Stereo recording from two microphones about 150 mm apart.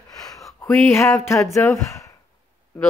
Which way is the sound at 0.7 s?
15° left (ahead or behind).